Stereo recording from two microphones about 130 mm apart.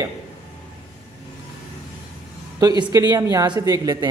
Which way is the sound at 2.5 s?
30° right (ahead or behind).